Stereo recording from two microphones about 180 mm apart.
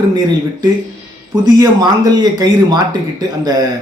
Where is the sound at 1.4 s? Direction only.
20° right (ahead or behind).